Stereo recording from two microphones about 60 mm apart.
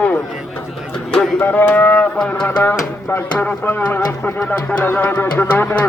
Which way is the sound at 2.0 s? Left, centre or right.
Centre.